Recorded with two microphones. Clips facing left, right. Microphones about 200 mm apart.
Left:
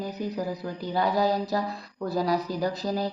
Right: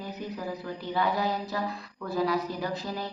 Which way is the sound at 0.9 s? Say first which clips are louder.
Left 4 dB; 40° left (ahead or behind).